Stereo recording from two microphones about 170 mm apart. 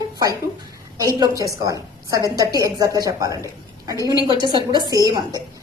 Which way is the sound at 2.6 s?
20° right (ahead or behind).